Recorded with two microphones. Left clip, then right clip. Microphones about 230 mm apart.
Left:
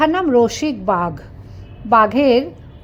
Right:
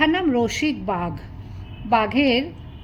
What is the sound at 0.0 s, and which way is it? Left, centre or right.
A woman's voice, centre.